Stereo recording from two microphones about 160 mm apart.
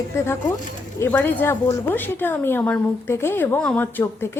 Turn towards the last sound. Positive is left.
turn(degrees=15)  # may be behind; listen again after turning